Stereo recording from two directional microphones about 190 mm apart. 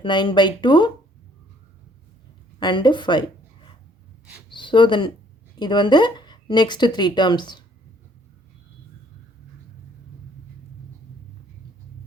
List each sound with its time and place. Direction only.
0.0 s a woman's voice: 25° left (ahead or behind)
2.6 s a woman's voice: 25° left (ahead or behind)